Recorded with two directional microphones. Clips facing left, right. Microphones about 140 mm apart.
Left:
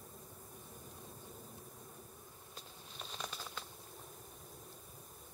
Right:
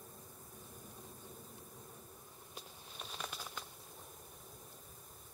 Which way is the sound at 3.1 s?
5° right (ahead or behind).